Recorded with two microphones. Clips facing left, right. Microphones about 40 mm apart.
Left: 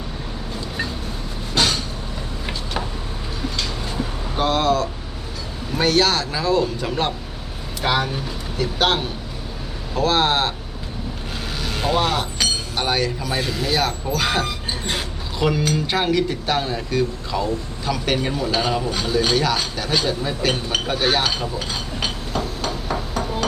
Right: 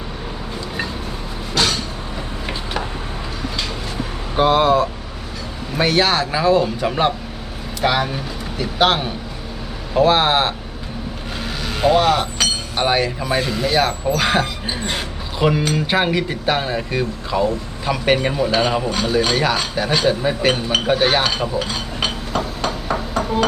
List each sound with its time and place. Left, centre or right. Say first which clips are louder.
4.4 s speech: right 5 dB; centre
11.6 s chink: right 6 dB; centre
12.8 s speech: right 4 dB; right
13.4 s speech: right 3 dB; centre
20.9 s speech: right 4 dB; right
21.6 s a sound: right 3 dB; centre